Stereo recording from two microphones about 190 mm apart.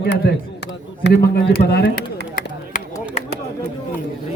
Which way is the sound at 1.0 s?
60° left (ahead or behind).